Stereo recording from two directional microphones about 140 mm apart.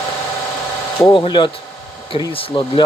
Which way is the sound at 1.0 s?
35° left (ahead or behind).